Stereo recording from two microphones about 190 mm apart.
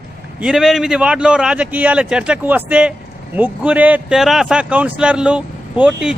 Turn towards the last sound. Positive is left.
turn(degrees=-5)  # may be behind; listen again after turning